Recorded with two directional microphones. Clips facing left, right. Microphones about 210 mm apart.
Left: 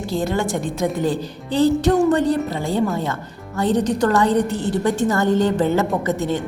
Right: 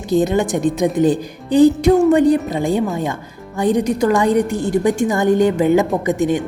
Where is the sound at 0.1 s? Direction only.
20° right (ahead or behind).